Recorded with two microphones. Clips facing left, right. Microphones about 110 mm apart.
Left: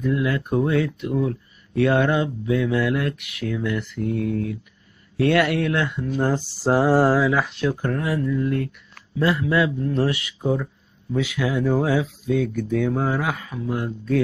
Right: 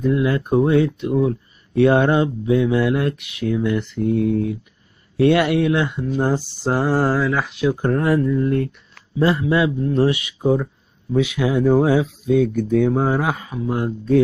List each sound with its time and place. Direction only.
0.0 s speech: 25° right (ahead or behind)
6.6 s speech: centre (ahead or behind)
7.7 s speech: 25° right (ahead or behind)
8.0 s speech: 45° right (ahead or behind); by 14.2 s 25° right (ahead or behind)